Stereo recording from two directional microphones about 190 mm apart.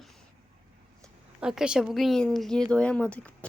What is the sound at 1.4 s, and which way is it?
A woman's voice, 5° right (ahead or behind).